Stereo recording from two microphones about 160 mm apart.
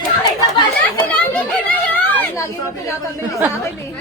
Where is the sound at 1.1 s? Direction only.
10° left (ahead or behind).